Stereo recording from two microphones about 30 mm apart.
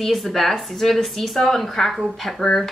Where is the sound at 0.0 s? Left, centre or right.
Centre.